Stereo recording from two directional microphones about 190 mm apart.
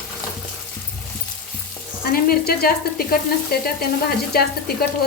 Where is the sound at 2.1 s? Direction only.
50° left (ahead or behind).